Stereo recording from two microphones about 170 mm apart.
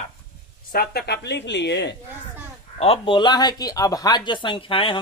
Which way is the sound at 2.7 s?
35° left (ahead or behind).